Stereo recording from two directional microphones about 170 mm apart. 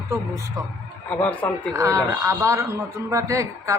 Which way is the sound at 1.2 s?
5° left (ahead or behind).